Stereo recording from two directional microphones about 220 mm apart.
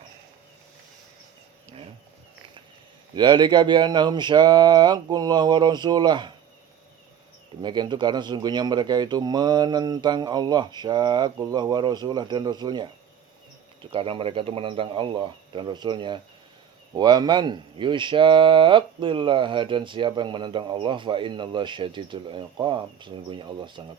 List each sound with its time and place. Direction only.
3.2 s speech: 20° right (ahead or behind)
7.6 s speech: 20° right (ahead or behind)
13.9 s speech: 25° right (ahead or behind)